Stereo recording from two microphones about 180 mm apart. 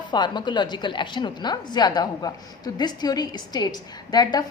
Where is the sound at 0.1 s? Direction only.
25° left (ahead or behind).